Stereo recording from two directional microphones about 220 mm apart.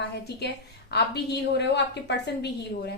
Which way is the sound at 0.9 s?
50° left (ahead or behind).